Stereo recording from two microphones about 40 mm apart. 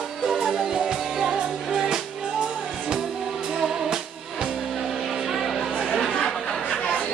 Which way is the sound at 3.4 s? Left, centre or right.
Centre.